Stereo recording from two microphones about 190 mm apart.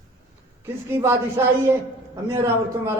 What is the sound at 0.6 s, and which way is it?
A woman's voice, 15° right (ahead or behind).